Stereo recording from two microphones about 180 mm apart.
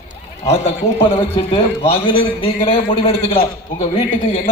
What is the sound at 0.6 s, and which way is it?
A man's voice, 30° left (ahead or behind).